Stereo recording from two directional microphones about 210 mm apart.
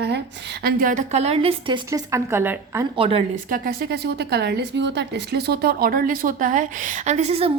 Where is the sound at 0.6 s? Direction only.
40° right (ahead or behind); by 2.8 s 10° right (ahead or behind).